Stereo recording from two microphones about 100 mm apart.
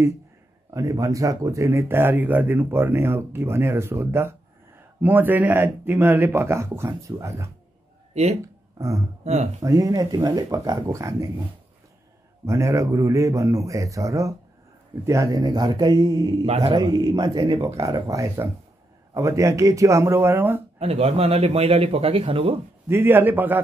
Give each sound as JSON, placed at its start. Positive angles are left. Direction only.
{"t": 0.7, "sound": "speech", "side_deg": -35}
{"t": 8.1, "sound": "speech", "side_deg": -90}
{"t": 8.7, "sound": "speech", "side_deg": -35}
{"t": 9.2, "sound": "speech", "side_deg": -90}
{"t": 9.6, "sound": "speech", "side_deg": -35}
{"t": 12.4, "sound": "speech", "side_deg": -30}
{"t": 16.4, "sound": "speech", "side_deg": -90}
{"t": 16.7, "sound": "speech", "side_deg": -45}
{"t": 17.6, "sound": "speech", "side_deg": -30}
{"t": 20.8, "sound": "a man's voice", "side_deg": -90}
{"t": 22.8, "sound": "speech", "side_deg": -20}